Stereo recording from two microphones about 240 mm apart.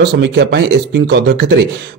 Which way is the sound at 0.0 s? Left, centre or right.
Right.